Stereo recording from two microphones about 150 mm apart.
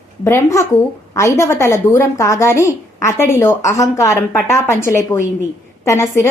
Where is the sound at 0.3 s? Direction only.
20° left (ahead or behind).